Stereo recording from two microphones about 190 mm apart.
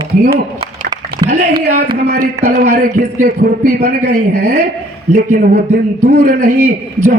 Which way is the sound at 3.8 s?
60° right (ahead or behind).